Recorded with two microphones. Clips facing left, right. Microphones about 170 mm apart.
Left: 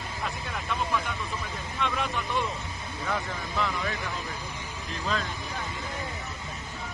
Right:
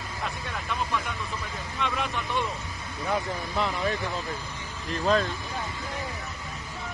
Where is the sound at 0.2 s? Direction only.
Centre (ahead or behind).